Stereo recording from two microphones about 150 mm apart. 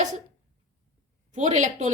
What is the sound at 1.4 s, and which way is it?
Speech, 55° right (ahead or behind).